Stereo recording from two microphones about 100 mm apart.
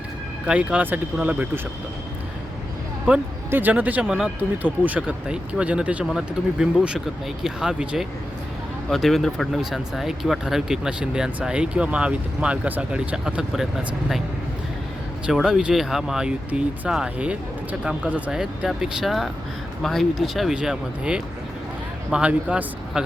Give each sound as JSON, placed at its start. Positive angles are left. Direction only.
{"t": 0.4, "sound": "speech", "side_deg": -10}
{"t": 3.1, "sound": "speech", "side_deg": -20}
{"t": 15.3, "sound": "speech", "side_deg": -5}